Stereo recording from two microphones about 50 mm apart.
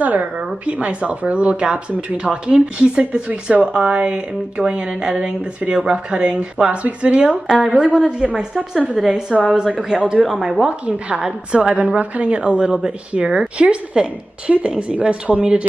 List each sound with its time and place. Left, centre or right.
0.0 s a woman's voice: right
3.7 s a woman's voice: centre
9.8 s speech: centre
10.6 s a woman's voice: centre